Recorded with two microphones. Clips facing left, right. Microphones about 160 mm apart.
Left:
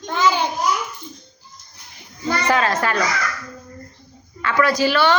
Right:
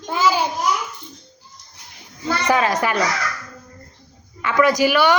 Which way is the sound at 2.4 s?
15° right (ahead or behind).